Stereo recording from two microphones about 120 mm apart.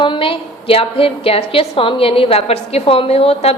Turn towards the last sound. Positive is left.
turn(degrees=55)  # may be behind; listen again after turning